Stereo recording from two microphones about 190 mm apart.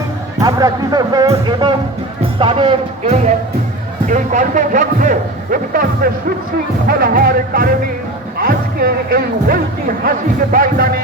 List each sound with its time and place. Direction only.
0.3 s speech: 20° right (ahead or behind); by 11.0 s 50° right (ahead or behind)